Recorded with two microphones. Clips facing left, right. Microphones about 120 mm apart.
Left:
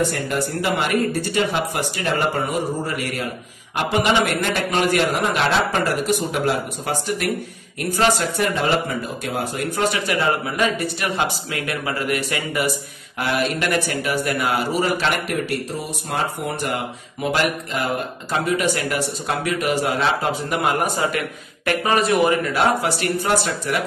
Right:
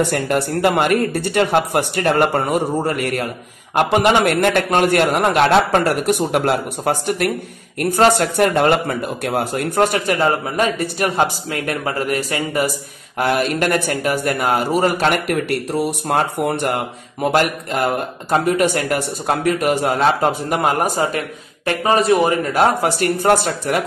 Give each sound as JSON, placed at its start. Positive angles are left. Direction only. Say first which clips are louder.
{"t": 0.0, "sound": "a man's voice", "louder": "right 4 dB", "side_deg": -70}